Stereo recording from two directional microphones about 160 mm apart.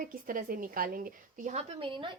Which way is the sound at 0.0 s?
60° right (ahead or behind).